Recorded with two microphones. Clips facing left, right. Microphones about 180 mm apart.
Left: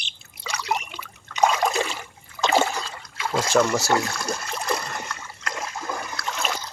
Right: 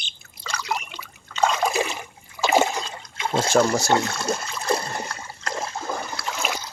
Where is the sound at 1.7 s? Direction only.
15° right (ahead or behind); by 3.7 s 30° right (ahead or behind).